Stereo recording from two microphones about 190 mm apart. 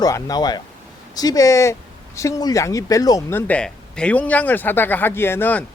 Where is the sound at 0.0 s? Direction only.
20° left (ahead or behind).